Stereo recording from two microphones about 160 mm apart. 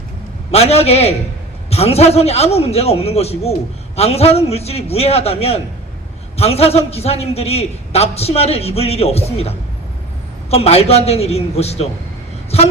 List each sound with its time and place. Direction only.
0.5 s a man's voice: 40° left (ahead or behind)